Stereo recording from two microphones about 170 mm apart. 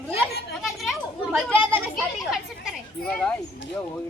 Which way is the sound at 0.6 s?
Centre (ahead or behind).